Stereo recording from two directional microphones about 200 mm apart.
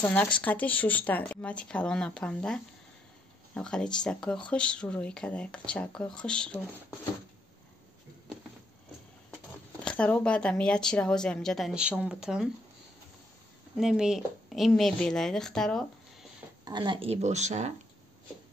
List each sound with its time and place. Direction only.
0.0 s a woman's voice: 10° left (ahead or behind)
9.8 s a woman's voice: 5° left (ahead or behind)
13.7 s a woman's voice: centre (ahead or behind)
16.6 s speech: 25° right (ahead or behind)